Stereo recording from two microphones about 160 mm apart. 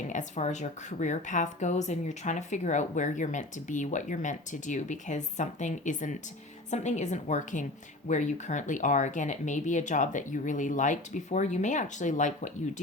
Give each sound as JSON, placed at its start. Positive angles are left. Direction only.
{"t": 0.1, "sound": "speech", "side_deg": 50}